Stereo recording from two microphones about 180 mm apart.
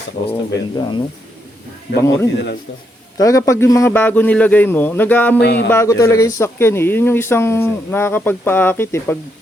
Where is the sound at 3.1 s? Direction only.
20° left (ahead or behind).